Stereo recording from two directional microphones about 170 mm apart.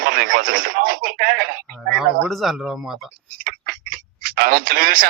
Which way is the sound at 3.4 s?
60° right (ahead or behind).